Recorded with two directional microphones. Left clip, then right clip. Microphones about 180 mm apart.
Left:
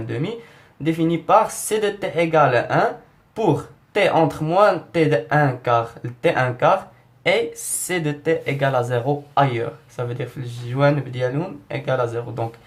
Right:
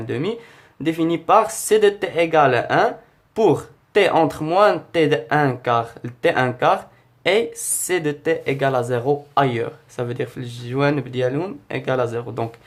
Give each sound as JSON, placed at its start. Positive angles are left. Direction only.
{"t": 0.1, "sound": "speech", "side_deg": -30}